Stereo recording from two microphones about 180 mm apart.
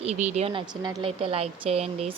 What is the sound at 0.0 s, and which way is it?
Speech, 40° right (ahead or behind).